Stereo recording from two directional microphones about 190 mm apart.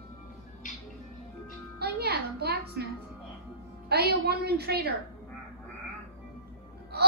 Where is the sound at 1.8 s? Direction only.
55° right (ahead or behind).